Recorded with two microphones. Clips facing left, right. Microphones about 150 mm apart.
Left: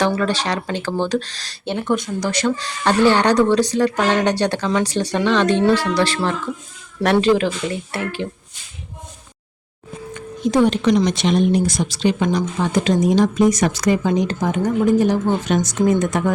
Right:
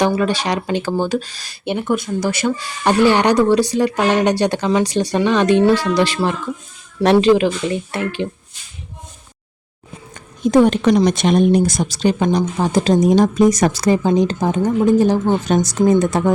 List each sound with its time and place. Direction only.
0.0 s speech: 15° right (ahead or behind)
10.2 s speech: 50° right (ahead or behind)
12.4 s speech: 35° right (ahead or behind)